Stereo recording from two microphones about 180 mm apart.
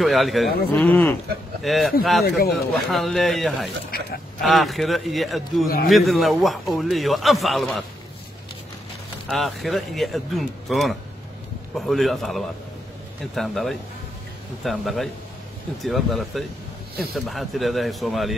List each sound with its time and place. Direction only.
0.0 s a man's voice: centre (ahead or behind)
2.2 s speech: 60° left (ahead or behind)
2.5 s a man's voice: centre (ahead or behind)
9.3 s a man's voice: centre (ahead or behind)